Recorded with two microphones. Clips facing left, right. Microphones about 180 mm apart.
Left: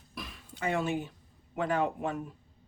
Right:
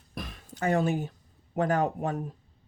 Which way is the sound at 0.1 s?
45° right (ahead or behind).